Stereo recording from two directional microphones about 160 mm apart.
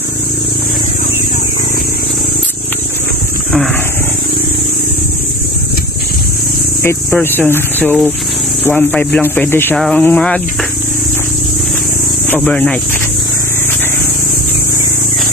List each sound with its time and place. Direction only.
6.8 s speech: 15° left (ahead or behind)
12.4 s speech: 5° left (ahead or behind)